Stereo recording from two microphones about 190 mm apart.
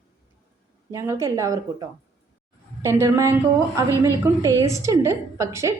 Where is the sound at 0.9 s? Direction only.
15° right (ahead or behind).